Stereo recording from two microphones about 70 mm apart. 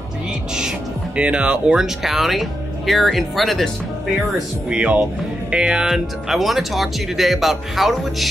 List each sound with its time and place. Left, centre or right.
0.6 s music: centre
2.0 s speech: centre
4.6 s speech: centre